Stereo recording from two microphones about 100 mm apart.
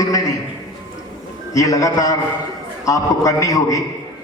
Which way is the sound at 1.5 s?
35° left (ahead or behind).